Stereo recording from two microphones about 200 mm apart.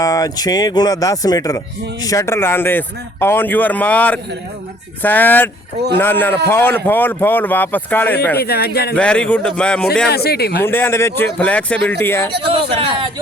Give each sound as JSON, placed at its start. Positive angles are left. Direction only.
{"t": 0.0, "sound": "speech", "side_deg": 20}
{"t": 8.4, "sound": "speech", "side_deg": 50}
{"t": 9.0, "sound": "a man's voice", "side_deg": 5}
{"t": 10.1, "sound": "speech", "side_deg": 50}
{"t": 10.7, "sound": "speech", "side_deg": 10}
{"t": 12.5, "sound": "speech", "side_deg": -25}